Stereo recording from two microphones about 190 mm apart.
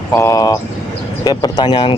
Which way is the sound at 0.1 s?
15° left (ahead or behind).